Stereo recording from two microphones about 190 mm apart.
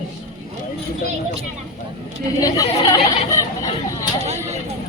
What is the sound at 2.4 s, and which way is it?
Speech, 20° left (ahead or behind).